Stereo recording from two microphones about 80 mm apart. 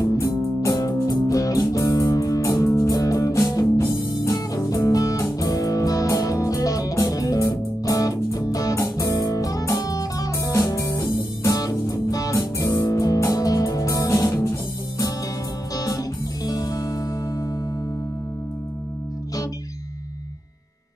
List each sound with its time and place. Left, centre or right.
0.0 s music: left